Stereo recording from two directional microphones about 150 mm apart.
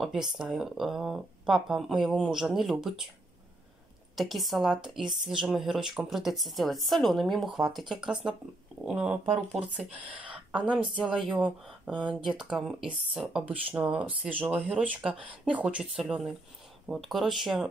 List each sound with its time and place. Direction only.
0.0 s speech: 5° right (ahead or behind)
4.2 s speech: centre (ahead or behind)
10.3 s a sound: 10° right (ahead or behind)
11.3 s speech: 10° right (ahead or behind)